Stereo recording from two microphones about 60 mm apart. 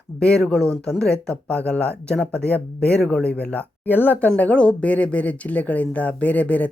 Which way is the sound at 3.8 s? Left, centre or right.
Left.